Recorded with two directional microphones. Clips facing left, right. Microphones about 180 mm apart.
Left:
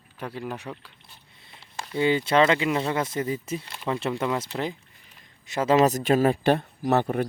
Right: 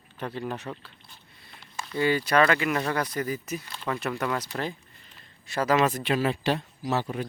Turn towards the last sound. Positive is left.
turn(degrees=55)  # may be behind; listen again after turning